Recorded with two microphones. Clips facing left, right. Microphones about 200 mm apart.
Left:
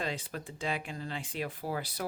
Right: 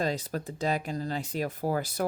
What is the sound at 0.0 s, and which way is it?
Speech, 40° right (ahead or behind).